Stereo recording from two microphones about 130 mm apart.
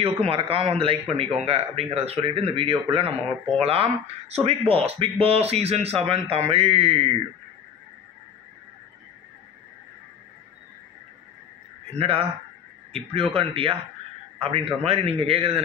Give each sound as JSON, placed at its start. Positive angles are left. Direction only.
{"t": 0.0, "sound": "speech", "side_deg": -45}
{"t": 11.9, "sound": "speech", "side_deg": -50}